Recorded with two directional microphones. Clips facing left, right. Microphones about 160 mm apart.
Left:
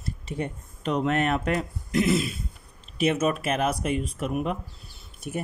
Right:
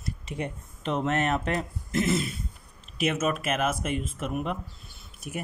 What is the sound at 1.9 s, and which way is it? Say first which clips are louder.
Speech: left 3 dB; 40° right (ahead or behind).